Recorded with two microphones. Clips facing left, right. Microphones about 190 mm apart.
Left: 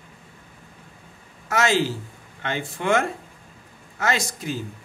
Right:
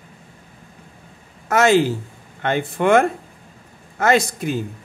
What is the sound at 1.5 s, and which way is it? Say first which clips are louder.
Speech: right 6 dB; 55° right (ahead or behind).